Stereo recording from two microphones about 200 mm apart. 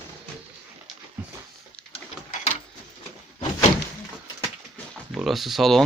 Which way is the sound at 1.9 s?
35° left (ahead or behind).